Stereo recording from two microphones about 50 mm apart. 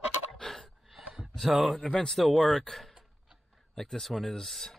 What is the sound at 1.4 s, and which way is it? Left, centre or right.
Speech, centre.